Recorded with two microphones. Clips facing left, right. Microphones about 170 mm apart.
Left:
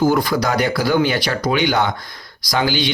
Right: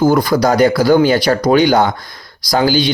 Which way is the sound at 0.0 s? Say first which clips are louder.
Right 5 dB; 40° right (ahead or behind).